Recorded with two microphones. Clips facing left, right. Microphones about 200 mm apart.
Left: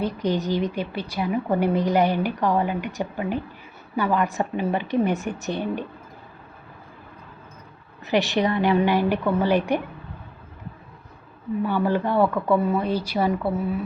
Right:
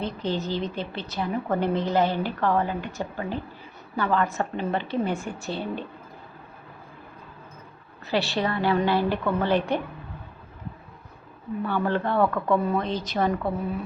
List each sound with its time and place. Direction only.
0.0 s a woman's voice: 15° left (ahead or behind)
8.0 s a woman's voice: 20° left (ahead or behind)
11.6 s a woman's voice: 10° left (ahead or behind)